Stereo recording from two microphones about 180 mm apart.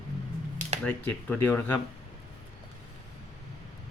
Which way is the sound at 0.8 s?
10° left (ahead or behind).